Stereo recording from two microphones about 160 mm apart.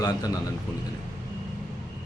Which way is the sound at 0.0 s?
25° left (ahead or behind).